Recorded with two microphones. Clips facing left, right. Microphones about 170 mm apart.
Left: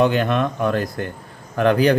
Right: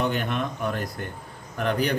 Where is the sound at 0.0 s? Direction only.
90° left.